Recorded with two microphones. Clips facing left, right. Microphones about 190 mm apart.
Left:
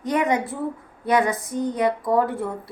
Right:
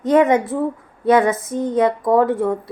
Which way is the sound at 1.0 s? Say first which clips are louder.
Right 6 dB; 20° right (ahead or behind).